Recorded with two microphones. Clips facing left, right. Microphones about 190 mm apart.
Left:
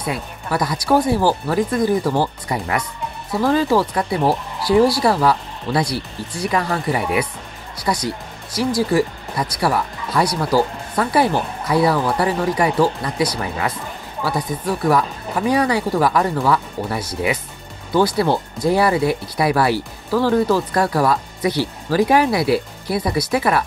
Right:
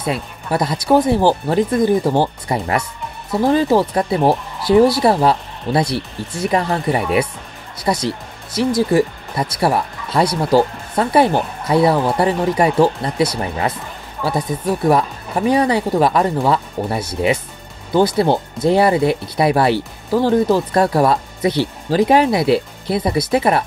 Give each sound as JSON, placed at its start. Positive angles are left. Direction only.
{"t": 0.0, "sound": "speech", "side_deg": -25}